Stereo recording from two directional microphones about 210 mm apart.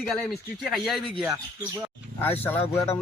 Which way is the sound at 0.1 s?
Centre (ahead or behind).